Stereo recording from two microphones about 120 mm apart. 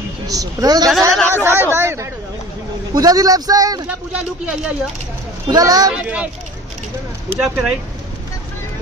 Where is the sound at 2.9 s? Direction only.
30° right (ahead or behind).